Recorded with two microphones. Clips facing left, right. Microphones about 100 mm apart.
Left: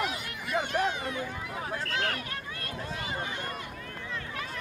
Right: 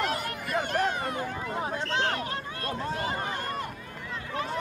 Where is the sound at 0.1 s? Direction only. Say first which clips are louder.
Right 3 dB; 45° right (ahead or behind).